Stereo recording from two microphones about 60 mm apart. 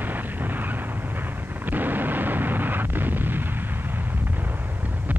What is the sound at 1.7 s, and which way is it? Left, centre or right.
Explosion, right.